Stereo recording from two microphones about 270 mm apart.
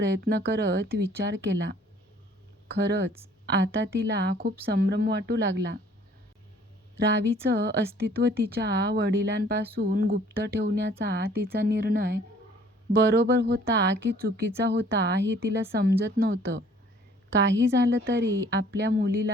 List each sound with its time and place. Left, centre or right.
0.0 s speech: right
2.7 s a woman's voice: right
7.1 s speech: right